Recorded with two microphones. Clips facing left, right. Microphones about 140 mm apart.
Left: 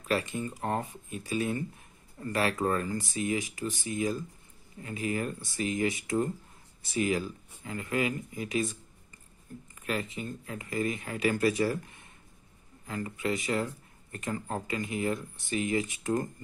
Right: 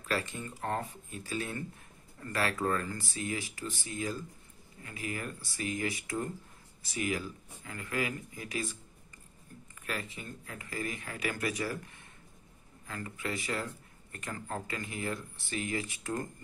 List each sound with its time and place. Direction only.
0.1 s speech: 15° left (ahead or behind)
9.8 s speech: 20° left (ahead or behind)
12.8 s speech: 20° left (ahead or behind)